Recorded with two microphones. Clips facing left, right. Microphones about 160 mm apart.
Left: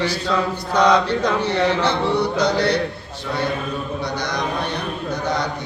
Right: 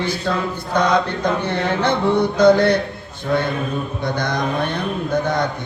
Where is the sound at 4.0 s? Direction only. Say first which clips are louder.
Right 4 dB; 50° right (ahead or behind).